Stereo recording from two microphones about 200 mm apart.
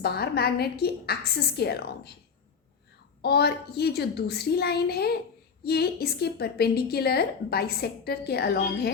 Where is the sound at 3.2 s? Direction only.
55° left (ahead or behind).